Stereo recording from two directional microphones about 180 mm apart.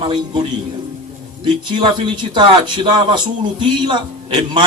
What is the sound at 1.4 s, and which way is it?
Speech, 25° right (ahead or behind).